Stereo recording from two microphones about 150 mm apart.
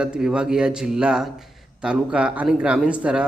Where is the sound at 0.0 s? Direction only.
5° right (ahead or behind).